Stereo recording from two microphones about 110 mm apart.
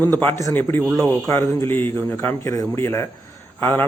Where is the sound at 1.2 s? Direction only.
25° left (ahead or behind).